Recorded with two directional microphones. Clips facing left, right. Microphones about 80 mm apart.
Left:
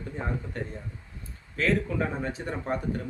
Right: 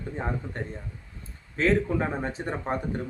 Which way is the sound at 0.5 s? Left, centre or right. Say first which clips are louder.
Even; right.